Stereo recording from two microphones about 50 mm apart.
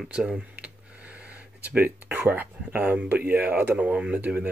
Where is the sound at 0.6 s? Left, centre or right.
Right.